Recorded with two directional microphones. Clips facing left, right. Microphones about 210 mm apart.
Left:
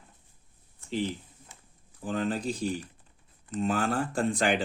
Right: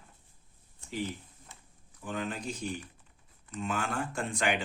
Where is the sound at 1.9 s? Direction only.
35° left (ahead or behind).